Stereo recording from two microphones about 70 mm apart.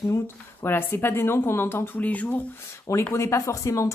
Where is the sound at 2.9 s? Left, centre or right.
Left.